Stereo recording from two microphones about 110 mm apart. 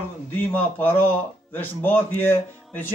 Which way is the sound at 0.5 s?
15° left (ahead or behind).